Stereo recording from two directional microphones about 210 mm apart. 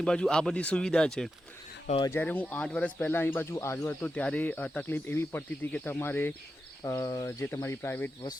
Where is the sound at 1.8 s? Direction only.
25° left (ahead or behind).